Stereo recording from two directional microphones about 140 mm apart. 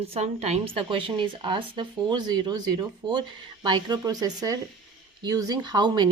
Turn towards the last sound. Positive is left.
turn(degrees=-30)  # may be behind; listen again after turning